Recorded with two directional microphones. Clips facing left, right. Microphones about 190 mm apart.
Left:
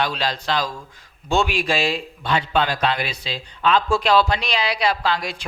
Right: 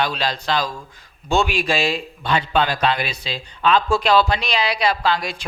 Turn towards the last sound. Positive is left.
turn(degrees=-15)  # may be behind; listen again after turning